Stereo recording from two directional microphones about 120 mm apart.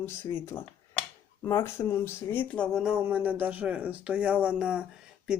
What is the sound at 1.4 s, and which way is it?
Speech, 25° left (ahead or behind).